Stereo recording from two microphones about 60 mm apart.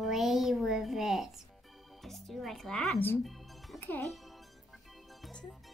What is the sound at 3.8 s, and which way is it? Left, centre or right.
Speech, left.